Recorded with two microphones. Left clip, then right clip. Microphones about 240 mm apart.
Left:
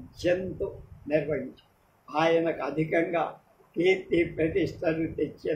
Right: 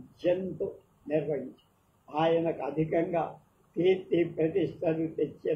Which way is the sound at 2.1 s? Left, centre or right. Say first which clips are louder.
Left 3 dB; left.